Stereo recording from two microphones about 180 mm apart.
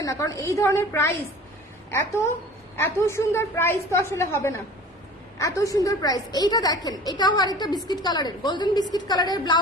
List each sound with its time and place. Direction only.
0.0 s a woman's voice: 20° left (ahead or behind)
2.7 s a woman's voice: 15° left (ahead or behind)